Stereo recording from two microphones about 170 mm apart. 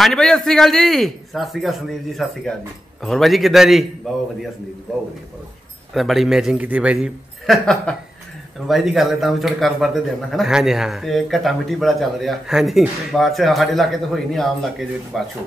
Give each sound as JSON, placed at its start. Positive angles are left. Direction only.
{"t": 0.0, "sound": "speech", "side_deg": 0}